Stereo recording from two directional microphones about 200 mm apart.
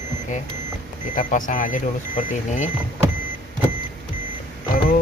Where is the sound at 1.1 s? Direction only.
40° left (ahead or behind).